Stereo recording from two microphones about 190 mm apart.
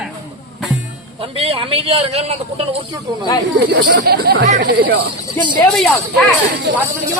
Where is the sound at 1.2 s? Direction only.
30° right (ahead or behind).